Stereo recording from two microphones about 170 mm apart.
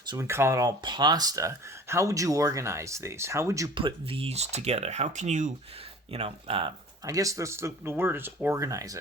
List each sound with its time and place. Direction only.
0.1 s speech: 15° right (ahead or behind); by 5.5 s 45° right (ahead or behind)
6.1 s speech: 35° right (ahead or behind)